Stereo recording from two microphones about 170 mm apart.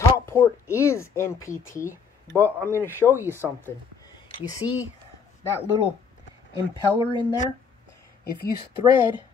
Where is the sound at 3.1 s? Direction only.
15° right (ahead or behind).